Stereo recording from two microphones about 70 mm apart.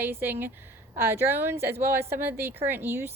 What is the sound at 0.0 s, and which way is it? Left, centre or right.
A woman's voice, right.